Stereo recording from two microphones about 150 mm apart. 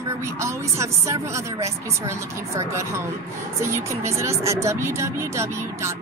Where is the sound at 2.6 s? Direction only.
20° right (ahead or behind).